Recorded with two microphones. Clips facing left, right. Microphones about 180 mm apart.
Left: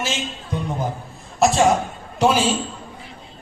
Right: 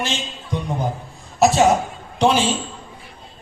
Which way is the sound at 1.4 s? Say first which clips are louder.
Right 1 dB; centre (ahead or behind).